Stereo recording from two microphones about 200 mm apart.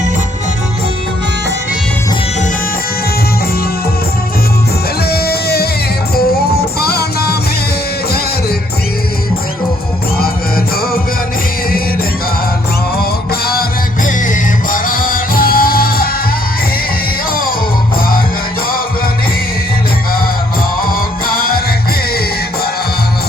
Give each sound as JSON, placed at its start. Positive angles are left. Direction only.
{"t": 5.0, "sound": "music", "side_deg": 50}
{"t": 13.0, "sound": "music", "side_deg": 50}
{"t": 21.3, "sound": "music", "side_deg": 45}